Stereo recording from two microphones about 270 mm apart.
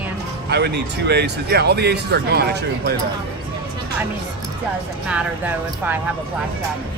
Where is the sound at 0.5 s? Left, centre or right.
Right.